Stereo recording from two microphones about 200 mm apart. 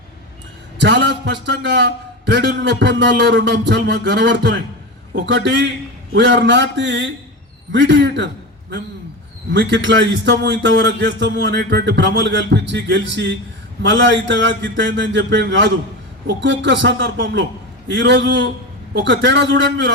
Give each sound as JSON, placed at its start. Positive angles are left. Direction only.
{"t": 0.8, "sound": "a man's voice", "side_deg": -60}
{"t": 9.5, "sound": "a man's voice", "side_deg": -65}